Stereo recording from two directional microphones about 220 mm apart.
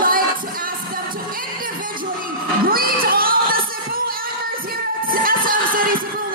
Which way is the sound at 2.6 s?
40° right (ahead or behind).